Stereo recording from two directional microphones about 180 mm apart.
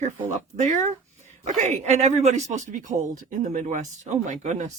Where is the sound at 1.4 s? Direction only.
40° right (ahead or behind).